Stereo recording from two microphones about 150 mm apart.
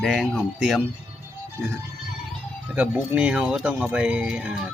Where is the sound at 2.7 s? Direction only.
10° right (ahead or behind).